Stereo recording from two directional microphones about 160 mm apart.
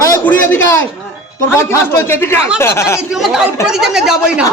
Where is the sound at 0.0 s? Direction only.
15° left (ahead or behind).